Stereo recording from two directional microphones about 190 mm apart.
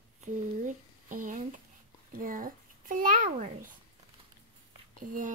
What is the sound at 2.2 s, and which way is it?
Babbling, 45° right (ahead or behind).